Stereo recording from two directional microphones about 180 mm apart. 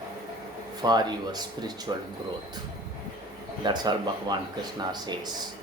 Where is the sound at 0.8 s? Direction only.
25° right (ahead or behind).